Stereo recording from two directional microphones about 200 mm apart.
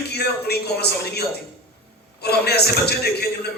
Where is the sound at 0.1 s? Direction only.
55° left (ahead or behind).